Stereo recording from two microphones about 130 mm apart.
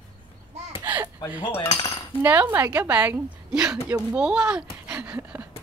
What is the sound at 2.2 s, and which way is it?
A woman's voice, 15° right (ahead or behind).